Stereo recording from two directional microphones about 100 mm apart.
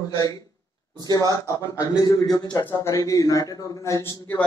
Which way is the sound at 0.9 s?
40° right (ahead or behind).